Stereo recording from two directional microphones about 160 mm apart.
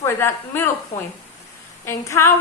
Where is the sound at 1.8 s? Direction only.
15° left (ahead or behind).